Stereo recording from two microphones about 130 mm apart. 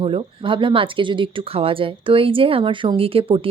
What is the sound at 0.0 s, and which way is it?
Speech, 45° right (ahead or behind).